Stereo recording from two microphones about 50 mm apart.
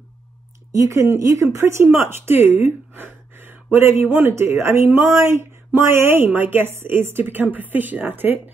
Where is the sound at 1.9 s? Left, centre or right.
Right.